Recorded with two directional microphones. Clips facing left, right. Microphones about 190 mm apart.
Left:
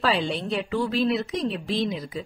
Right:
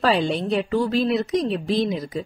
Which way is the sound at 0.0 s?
45° right (ahead or behind).